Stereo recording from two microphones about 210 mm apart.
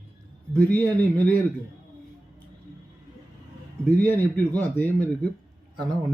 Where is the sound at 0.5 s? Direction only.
10° left (ahead or behind).